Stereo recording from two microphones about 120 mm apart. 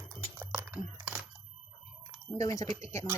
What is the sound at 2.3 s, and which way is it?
Speech, 30° left (ahead or behind).